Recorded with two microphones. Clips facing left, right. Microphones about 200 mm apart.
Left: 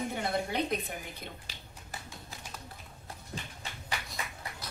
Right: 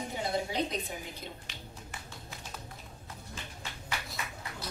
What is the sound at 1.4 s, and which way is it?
Tap, 35° left (ahead or behind).